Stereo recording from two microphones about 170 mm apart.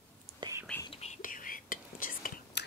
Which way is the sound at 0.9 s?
40° left (ahead or behind).